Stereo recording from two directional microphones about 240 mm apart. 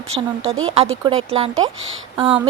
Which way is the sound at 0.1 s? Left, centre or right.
Right.